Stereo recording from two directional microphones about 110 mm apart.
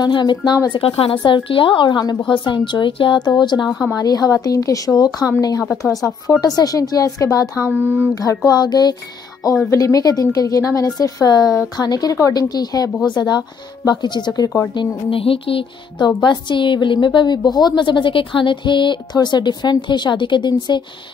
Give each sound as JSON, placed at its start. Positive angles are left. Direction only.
{"t": 0.0, "sound": "a woman's voice", "side_deg": 40}
{"t": 3.6, "sound": "speech", "side_deg": -5}
{"t": 3.9, "sound": "speech", "side_deg": 35}
{"t": 6.4, "sound": "speech", "side_deg": 35}
{"t": 7.6, "sound": "speech", "side_deg": -15}
{"t": 8.5, "sound": "speech", "side_deg": 40}
{"t": 14.7, "sound": "a woman's voice", "side_deg": 50}